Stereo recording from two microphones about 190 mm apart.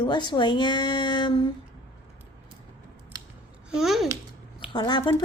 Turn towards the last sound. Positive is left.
turn(degrees=25)  # may be behind; listen again after turning